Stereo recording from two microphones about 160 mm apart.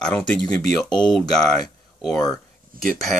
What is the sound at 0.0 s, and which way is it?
Speech, 5° left (ahead or behind).